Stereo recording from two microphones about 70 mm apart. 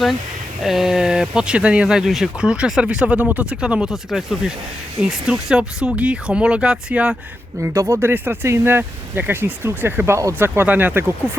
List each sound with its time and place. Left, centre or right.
0.6 s speech: centre
7.6 s speech: right